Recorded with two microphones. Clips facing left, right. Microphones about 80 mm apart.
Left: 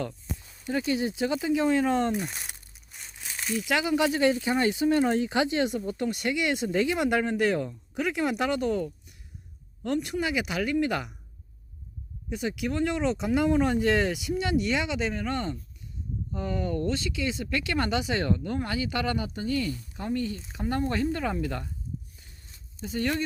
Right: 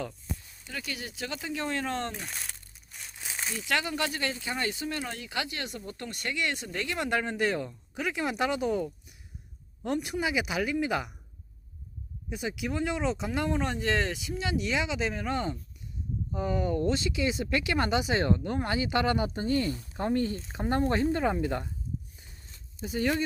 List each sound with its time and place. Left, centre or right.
0.6 s speech: left; by 3.7 s centre
3.7 s speech: centre
12.3 s speech: centre; by 21.7 s right
22.9 s speech: centre